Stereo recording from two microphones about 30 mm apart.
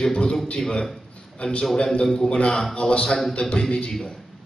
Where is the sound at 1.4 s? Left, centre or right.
Left.